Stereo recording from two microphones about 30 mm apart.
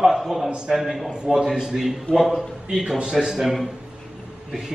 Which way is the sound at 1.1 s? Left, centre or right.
Right.